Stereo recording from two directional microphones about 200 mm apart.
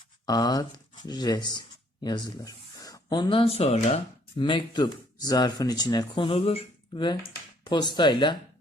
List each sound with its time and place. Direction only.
0.3 s speech: 20° left (ahead or behind)